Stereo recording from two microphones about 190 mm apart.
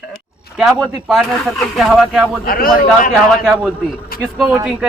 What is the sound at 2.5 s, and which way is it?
Speech, 50° left (ahead or behind).